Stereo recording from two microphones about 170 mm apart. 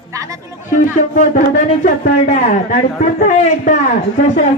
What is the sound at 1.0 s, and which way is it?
A man's voice, 50° left (ahead or behind).